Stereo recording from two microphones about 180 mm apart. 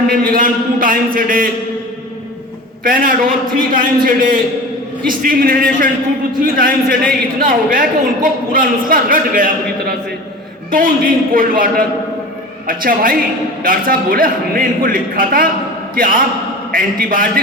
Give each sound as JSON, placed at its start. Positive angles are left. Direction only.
{"t": 0.1, "sound": "a man's voice", "side_deg": -50}
{"t": 2.8, "sound": "a man's voice", "side_deg": -50}
{"t": 10.7, "sound": "a man's voice", "side_deg": -50}